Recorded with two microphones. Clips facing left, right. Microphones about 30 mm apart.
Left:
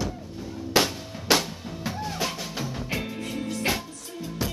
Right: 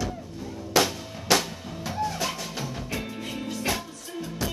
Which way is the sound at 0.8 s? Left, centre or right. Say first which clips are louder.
Even; left.